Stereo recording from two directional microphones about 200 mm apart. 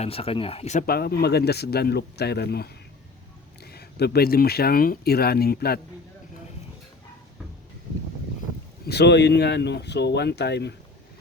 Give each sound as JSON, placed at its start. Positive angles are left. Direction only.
{"t": 0.0, "sound": "speech", "side_deg": 30}
{"t": 0.9, "sound": "speech", "side_deg": 50}
{"t": 8.9, "sound": "speech", "side_deg": 55}